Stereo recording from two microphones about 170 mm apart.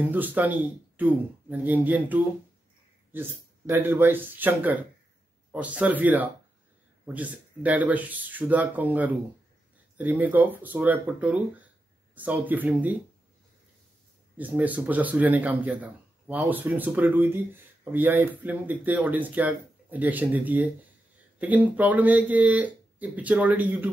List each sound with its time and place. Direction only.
0.0 s speech: 10° right (ahead or behind)
14.3 s speech: 10° right (ahead or behind)